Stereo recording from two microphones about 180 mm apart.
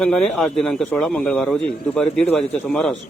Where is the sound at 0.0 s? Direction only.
5° left (ahead or behind).